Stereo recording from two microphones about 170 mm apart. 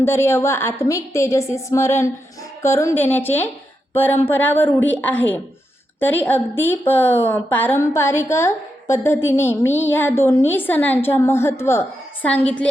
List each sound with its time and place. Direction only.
0.0 s a woman's voice: 15° left (ahead or behind)